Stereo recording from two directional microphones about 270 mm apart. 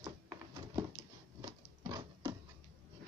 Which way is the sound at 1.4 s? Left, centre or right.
Centre.